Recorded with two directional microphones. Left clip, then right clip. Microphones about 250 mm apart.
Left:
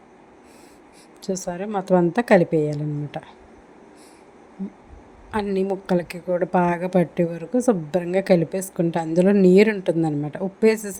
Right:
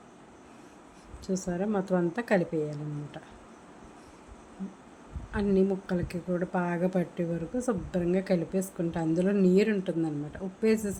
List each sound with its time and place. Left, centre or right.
1.2 s speech: left
5.3 s speech: left